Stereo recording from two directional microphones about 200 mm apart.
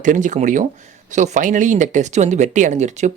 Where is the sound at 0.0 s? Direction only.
40° right (ahead or behind).